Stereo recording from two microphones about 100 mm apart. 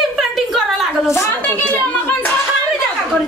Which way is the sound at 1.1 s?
25° left (ahead or behind).